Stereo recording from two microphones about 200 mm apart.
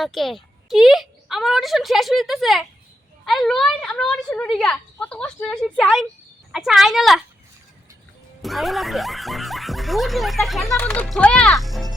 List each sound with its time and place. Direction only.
0.0 s speech: centre (ahead or behind)
8.4 s speech: centre (ahead or behind)